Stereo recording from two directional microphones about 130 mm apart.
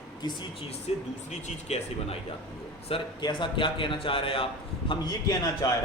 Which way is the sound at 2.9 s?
40° left (ahead or behind).